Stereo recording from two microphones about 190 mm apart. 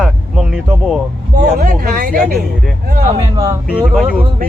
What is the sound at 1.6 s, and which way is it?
Speech, 50° right (ahead or behind).